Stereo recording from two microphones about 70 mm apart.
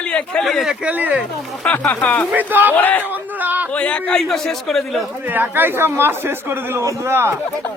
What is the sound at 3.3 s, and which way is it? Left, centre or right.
Speech, right.